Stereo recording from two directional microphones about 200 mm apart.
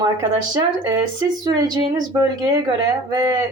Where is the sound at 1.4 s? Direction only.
20° right (ahead or behind).